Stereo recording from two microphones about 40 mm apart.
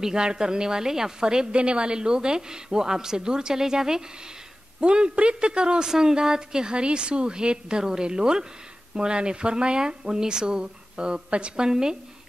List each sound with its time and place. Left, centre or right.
0.0 s speech: centre